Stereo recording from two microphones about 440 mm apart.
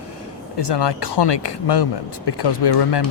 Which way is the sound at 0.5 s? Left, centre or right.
Left.